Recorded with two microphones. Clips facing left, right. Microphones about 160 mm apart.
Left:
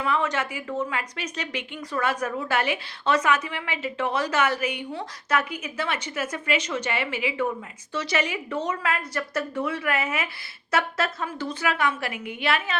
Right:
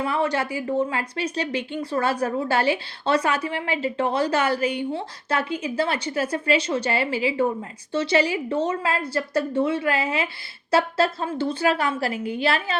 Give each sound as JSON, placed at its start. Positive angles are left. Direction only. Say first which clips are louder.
{"t": 0.0, "sound": "a woman's voice", "louder": "right 2 dB", "side_deg": -30}